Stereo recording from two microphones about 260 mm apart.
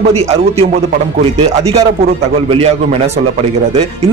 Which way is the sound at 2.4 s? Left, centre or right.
Right.